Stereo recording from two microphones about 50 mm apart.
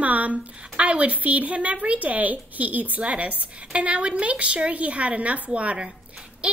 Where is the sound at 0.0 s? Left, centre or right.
Right.